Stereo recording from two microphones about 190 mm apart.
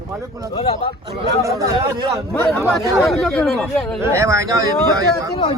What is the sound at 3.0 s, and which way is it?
Speech, 5° left (ahead or behind).